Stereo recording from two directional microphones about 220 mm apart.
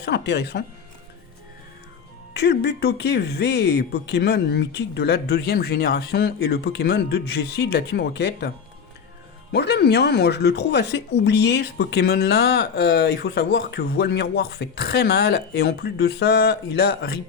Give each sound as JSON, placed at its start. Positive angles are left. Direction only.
{"t": 0.0, "sound": "speech", "side_deg": 50}
{"t": 2.3, "sound": "speech", "side_deg": 50}